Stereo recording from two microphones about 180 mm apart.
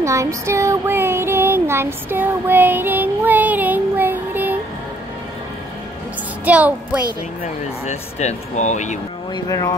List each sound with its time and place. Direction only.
0.0 s child singing: 15° right (ahead or behind)
6.4 s music: 10° right (ahead or behind)
7.8 s speech: 40° left (ahead or behind)
9.3 s speech: 20° left (ahead or behind)